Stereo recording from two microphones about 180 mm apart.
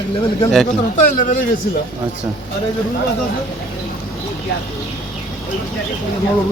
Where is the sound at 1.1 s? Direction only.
50° left (ahead or behind).